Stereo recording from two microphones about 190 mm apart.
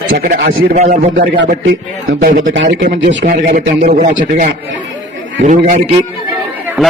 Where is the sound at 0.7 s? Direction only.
40° right (ahead or behind).